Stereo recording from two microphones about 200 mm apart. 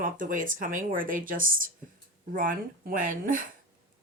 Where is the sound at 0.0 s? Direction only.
40° right (ahead or behind).